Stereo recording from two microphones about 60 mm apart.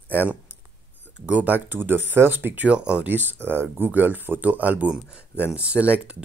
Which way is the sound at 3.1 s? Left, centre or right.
Right.